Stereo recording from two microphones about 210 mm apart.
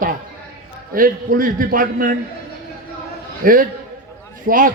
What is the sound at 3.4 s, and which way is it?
A man's voice, 40° right (ahead or behind).